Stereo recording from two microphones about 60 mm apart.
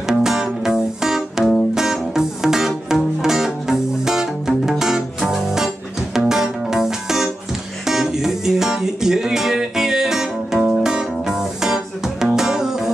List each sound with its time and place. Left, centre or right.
0.0 s music: centre